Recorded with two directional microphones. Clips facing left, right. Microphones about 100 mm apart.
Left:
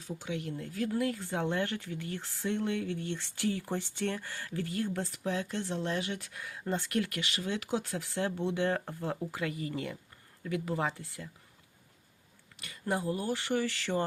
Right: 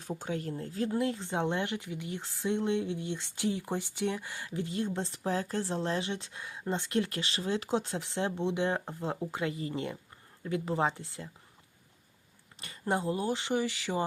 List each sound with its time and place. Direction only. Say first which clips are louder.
0.0 s speech: right 2 dB; 45° right (ahead or behind); by 11.3 s 25° right (ahead or behind)
12.5 s speech: right 2 dB; 30° right (ahead or behind); by 14.0 s 15° right (ahead or behind)